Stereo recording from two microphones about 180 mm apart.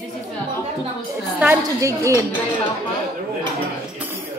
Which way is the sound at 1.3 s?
10° right (ahead or behind).